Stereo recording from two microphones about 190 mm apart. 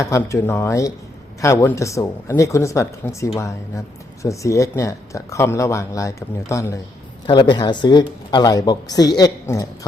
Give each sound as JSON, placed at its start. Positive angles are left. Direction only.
{"t": 0.0, "sound": "speech", "side_deg": 15}
{"t": 7.3, "sound": "speech", "side_deg": 25}